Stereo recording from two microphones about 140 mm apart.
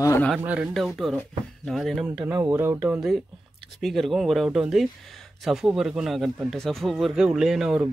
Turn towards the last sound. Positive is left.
turn(degrees=-5)  # may be behind; listen again after turning